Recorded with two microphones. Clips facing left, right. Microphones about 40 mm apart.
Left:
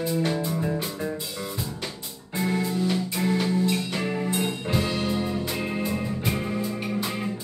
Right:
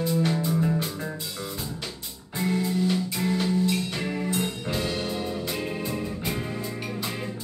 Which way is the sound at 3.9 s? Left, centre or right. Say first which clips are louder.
Left 2 dB; centre.